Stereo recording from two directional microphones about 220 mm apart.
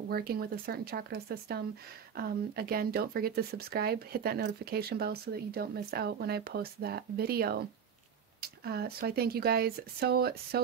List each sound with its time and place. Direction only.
0.1 s speech: 45° right (ahead or behind)